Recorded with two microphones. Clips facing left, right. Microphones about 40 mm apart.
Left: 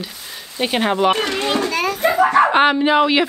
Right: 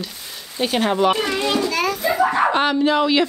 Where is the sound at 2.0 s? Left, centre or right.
Left.